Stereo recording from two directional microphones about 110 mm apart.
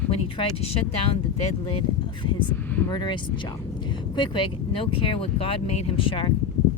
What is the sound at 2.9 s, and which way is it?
Speech, 40° left (ahead or behind).